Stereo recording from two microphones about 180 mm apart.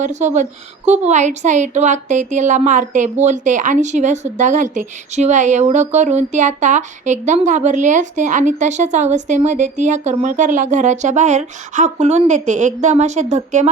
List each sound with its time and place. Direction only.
0.0 s a woman's voice: 40° right (ahead or behind)